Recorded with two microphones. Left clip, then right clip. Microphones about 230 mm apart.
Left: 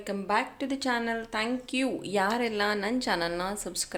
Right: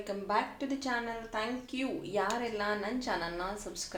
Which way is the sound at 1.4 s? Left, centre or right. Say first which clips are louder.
Left 4 dB; left.